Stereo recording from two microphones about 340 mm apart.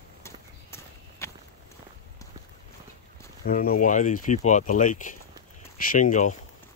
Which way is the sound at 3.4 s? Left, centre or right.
Left.